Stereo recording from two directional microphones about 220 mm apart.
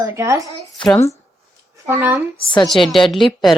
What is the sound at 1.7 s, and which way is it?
Speech, 10° right (ahead or behind).